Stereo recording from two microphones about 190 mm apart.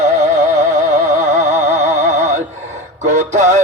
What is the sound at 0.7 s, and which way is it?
Music, 40° right (ahead or behind).